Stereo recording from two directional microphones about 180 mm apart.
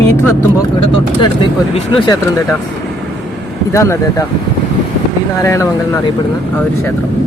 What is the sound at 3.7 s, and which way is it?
Speech, 15° left (ahead or behind).